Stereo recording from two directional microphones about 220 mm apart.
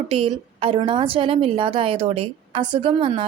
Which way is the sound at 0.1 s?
25° right (ahead or behind).